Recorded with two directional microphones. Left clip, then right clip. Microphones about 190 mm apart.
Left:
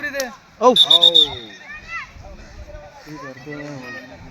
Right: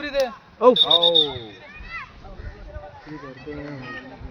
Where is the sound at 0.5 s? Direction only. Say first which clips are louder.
Left 2 dB; 60° left (ahead or behind).